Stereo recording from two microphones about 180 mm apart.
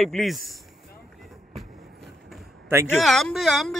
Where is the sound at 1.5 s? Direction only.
Centre (ahead or behind).